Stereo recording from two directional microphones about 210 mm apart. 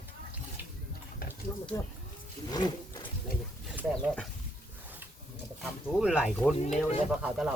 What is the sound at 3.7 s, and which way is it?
Speech, 5° right (ahead or behind).